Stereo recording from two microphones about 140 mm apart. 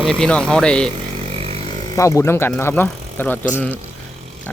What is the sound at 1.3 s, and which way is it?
Vehicle, 45° right (ahead or behind).